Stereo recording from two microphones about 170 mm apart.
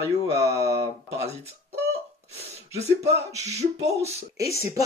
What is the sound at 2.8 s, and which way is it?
Beatboxing, 40° right (ahead or behind).